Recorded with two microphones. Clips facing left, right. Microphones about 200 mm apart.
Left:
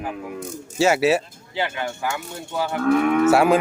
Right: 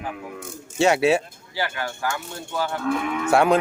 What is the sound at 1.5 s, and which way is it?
Speech, 20° left (ahead or behind).